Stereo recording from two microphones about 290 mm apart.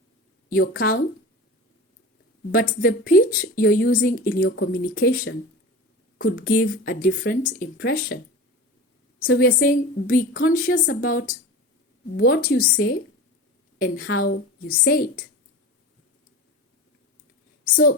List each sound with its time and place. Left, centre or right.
0.8 s speech: left
2.5 s a woman's voice: left
9.3 s a woman's voice: left